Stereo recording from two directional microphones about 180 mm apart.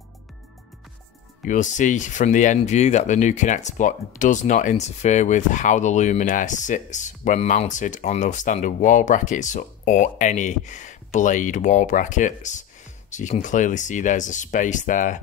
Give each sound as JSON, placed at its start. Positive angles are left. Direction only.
{"t": 1.4, "sound": "speech", "side_deg": 45}